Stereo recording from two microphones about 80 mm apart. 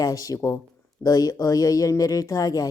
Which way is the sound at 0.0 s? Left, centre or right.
Left.